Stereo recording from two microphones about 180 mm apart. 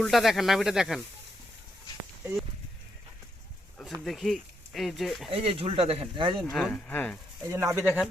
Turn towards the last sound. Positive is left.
turn(degrees=-15)  # may be behind; listen again after turning